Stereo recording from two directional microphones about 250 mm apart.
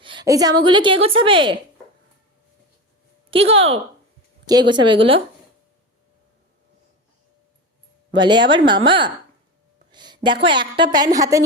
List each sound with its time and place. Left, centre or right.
0.0 s a woman's voice: centre
3.4 s a woman's voice: right
8.1 s a woman's voice: centre
9.9 s a sound: centre
10.4 s a woman's voice: centre